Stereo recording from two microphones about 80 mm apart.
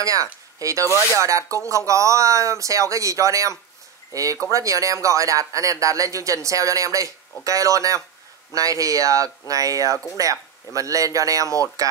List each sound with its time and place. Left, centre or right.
0.0 s speech: right
0.8 s speech: left
1.2 s speech: right